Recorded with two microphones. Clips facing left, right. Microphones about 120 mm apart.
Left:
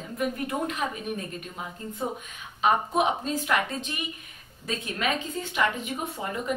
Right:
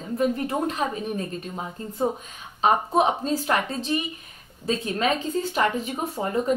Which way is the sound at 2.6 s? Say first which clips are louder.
Right 3 dB; 35° right (ahead or behind).